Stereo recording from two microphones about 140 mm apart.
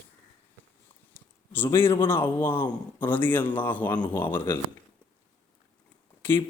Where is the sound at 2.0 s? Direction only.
15° left (ahead or behind).